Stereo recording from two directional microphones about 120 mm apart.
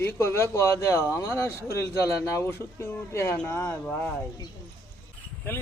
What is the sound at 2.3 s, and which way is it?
Speech, 20° left (ahead or behind).